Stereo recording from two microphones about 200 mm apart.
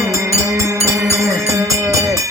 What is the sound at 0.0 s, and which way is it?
Music, 15° right (ahead or behind).